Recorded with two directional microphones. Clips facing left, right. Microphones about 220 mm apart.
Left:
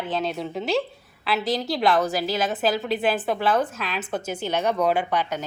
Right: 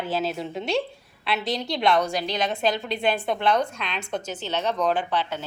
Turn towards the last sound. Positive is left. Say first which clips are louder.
# left 2 dB
turn(degrees=10)  # may be behind; listen again after turning